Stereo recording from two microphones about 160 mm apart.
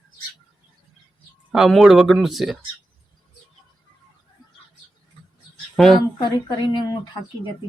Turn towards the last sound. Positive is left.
turn(degrees=25)  # may be behind; listen again after turning